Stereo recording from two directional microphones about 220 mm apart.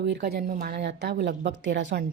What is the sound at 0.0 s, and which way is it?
Speech, 50° right (ahead or behind).